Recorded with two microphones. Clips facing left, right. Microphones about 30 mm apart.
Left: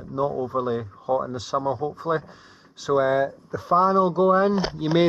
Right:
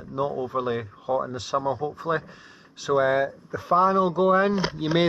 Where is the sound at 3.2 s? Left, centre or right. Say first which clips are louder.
Left 2 dB; right.